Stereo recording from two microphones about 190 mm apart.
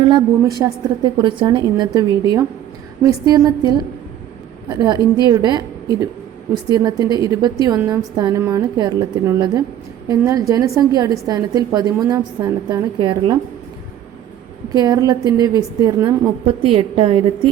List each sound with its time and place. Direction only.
0.0 s a woman's voice: 25° right (ahead or behind)
6.7 s a woman's voice: 20° right (ahead or behind)
14.7 s a woman's voice: 20° right (ahead or behind)
16.5 s a woman's voice: 30° right (ahead or behind)